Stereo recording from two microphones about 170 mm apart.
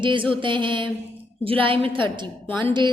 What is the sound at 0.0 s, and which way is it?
A woman's voice, 30° right (ahead or behind).